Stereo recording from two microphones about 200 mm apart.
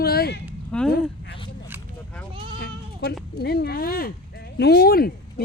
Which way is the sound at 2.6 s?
55° left (ahead or behind).